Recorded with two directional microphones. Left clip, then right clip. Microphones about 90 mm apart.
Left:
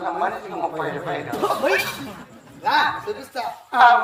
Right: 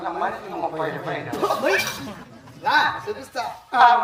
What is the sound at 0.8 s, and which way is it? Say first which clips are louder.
A man's voice: left 1 dB; 25° left (ahead or behind).